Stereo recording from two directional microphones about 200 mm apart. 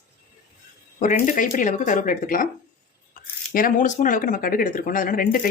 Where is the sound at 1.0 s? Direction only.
40° left (ahead or behind).